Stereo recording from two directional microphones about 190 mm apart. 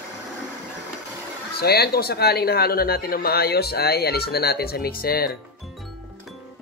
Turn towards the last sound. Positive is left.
turn(degrees=50)  # may be behind; listen again after turning